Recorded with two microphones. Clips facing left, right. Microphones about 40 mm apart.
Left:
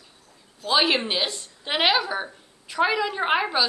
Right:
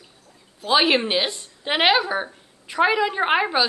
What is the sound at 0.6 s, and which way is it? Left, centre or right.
A woman's voice, centre.